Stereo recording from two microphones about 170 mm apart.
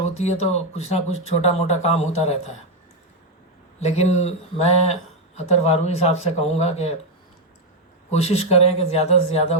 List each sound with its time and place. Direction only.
0.0 s speech: 40° left (ahead or behind)
3.8 s speech: 40° left (ahead or behind)
8.1 s speech: 40° left (ahead or behind)